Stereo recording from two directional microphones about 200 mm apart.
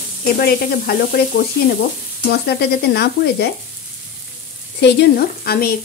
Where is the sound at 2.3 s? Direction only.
55° left (ahead or behind).